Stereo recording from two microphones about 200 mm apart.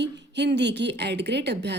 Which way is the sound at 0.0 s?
60° right (ahead or behind).